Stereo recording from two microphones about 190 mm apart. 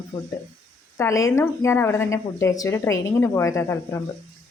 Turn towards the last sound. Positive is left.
turn(degrees=15)  # may be behind; listen again after turning